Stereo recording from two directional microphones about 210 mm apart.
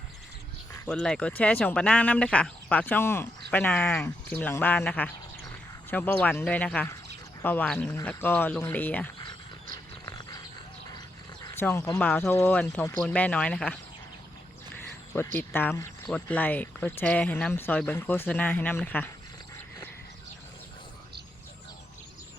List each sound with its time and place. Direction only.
0.7 s speech: 5° left (ahead or behind)
10.1 s dog: 15° left (ahead or behind)
11.4 s speech: 10° left (ahead or behind)
15.4 s speech: 10° left (ahead or behind)